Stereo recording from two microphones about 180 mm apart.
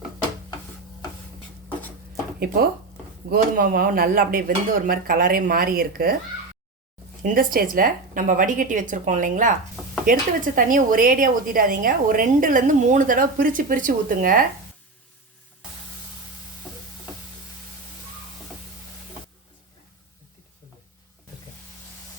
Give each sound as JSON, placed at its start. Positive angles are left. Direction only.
{"t": 3.2, "sound": "a woman's voice", "side_deg": -55}
{"t": 7.2, "sound": "a woman's voice", "side_deg": -50}